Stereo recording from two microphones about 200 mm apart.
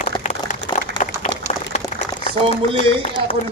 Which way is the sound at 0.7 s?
25° left (ahead or behind).